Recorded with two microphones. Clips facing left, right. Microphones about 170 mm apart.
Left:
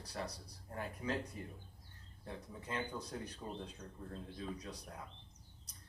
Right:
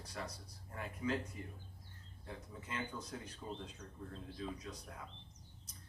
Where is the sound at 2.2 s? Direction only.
35° left (ahead or behind).